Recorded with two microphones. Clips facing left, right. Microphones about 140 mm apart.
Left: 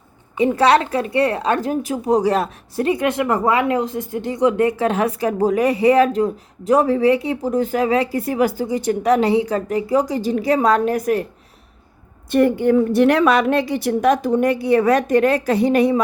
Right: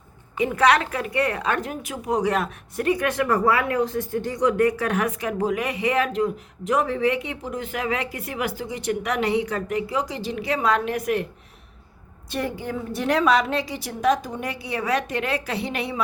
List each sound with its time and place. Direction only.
0.3 s a woman's voice: 30° left (ahead or behind)
12.3 s a woman's voice: 55° left (ahead or behind)